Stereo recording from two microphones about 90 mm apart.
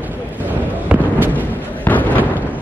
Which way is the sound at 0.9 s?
15° right (ahead or behind).